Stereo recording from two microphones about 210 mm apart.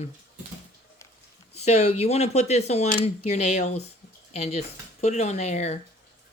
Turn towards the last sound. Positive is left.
turn(degrees=30)  # may be behind; listen again after turning